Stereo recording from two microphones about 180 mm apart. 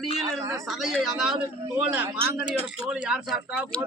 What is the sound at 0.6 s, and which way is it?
Speech, centre (ahead or behind).